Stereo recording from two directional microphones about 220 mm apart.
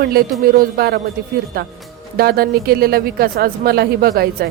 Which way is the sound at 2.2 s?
45° right (ahead or behind).